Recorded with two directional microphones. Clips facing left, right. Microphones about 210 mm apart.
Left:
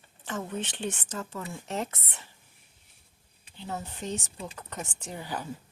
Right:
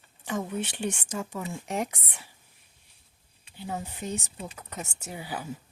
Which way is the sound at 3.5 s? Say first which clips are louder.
Right 2 dB; 10° right (ahead or behind).